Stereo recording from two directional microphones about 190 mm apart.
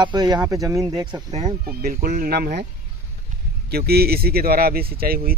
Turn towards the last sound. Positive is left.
turn(degrees=-50)  # may be behind; listen again after turning